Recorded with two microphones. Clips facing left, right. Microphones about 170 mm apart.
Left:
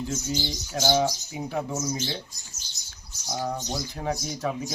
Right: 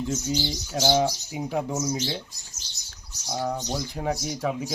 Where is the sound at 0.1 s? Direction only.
10° right (ahead or behind).